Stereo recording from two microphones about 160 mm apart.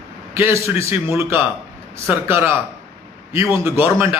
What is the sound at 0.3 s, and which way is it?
Speech, 15° right (ahead or behind).